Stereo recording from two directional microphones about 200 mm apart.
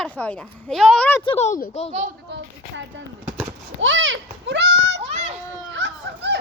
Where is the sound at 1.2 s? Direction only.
30° left (ahead or behind).